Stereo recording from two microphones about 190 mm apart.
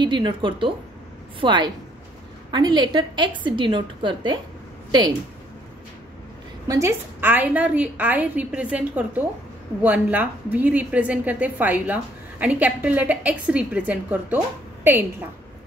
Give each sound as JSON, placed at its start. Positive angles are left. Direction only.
{"t": 0.0, "sound": "a woman's voice", "side_deg": -25}
{"t": 6.7, "sound": "a woman's voice", "side_deg": -15}